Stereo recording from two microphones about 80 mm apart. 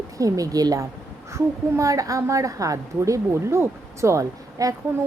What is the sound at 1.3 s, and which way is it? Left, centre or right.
A woman's voice, right.